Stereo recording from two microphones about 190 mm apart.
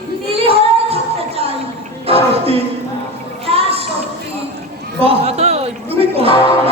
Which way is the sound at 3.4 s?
30° right (ahead or behind).